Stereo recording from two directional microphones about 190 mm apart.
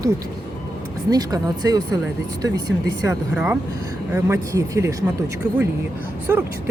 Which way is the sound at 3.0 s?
15° right (ahead or behind).